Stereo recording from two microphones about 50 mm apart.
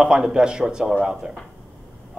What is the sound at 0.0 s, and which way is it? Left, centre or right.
A man's voice, centre.